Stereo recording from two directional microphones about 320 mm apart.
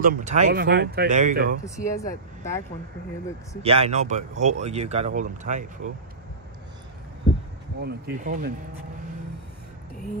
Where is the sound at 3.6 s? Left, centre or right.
Centre.